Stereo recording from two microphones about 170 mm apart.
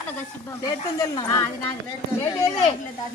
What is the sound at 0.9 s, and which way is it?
Speech, 20° left (ahead or behind).